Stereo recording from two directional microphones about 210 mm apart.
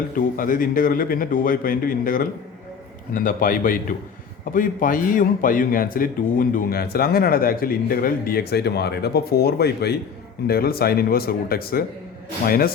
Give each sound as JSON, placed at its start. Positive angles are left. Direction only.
{"t": 0.2, "sound": "a man's voice", "side_deg": 40}